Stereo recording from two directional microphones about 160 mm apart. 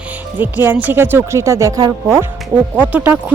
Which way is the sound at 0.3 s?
10° right (ahead or behind).